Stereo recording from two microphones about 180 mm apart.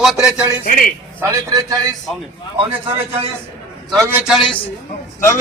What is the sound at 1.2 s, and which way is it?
Speech, 20° right (ahead or behind).